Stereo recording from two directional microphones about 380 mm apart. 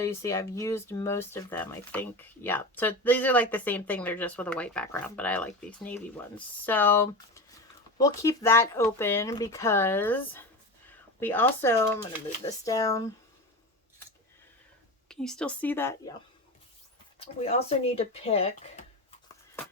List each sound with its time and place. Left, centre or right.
0.0 s speech: centre
15.1 s speech: centre
17.2 s speech: centre